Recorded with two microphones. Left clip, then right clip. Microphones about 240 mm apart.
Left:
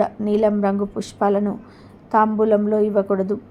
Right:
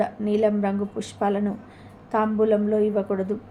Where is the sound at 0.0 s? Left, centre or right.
Left.